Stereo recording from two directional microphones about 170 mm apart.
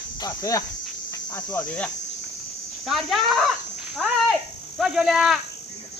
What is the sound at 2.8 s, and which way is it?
A man's voice, centre (ahead or behind).